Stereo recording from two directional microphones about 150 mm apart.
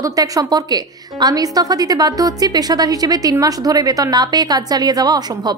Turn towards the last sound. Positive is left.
turn(degrees=-25)  # may be behind; listen again after turning